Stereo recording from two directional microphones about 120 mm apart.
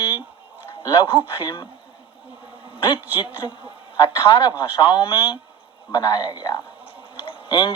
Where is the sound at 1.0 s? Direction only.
15° right (ahead or behind).